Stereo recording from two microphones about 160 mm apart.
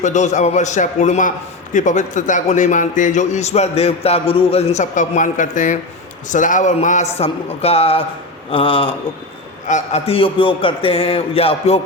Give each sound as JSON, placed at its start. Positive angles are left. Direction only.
{"t": 0.0, "sound": "a man's voice", "side_deg": 50}
{"t": 9.6, "sound": "a man's voice", "side_deg": 45}